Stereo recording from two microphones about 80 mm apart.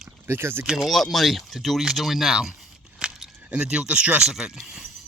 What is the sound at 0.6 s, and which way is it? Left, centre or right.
Speech, centre.